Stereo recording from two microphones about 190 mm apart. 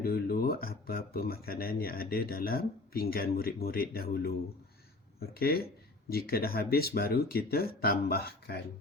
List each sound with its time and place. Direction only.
0.0 s speech: 55° left (ahead or behind)